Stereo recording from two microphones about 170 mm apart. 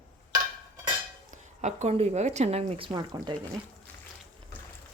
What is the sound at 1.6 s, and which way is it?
Speech, 45° right (ahead or behind).